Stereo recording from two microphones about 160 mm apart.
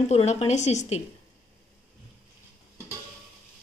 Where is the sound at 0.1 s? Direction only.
40° left (ahead or behind).